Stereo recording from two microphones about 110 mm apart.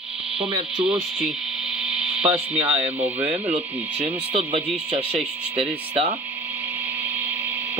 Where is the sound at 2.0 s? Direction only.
10° right (ahead or behind).